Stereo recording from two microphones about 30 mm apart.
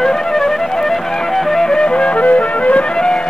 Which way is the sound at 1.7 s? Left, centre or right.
Left.